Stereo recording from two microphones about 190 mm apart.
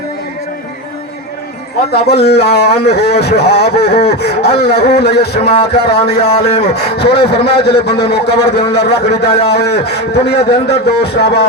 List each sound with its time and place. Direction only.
1.9 s speech: 60° left (ahead or behind)